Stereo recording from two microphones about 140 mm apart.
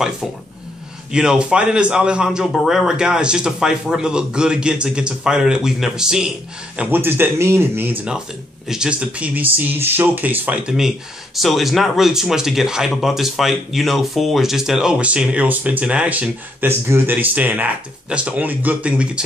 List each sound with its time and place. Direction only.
1.1 s a man's voice: 5° right (ahead or behind)
6.8 s speech: 15° right (ahead or behind)
8.6 s speech: 5° right (ahead or behind)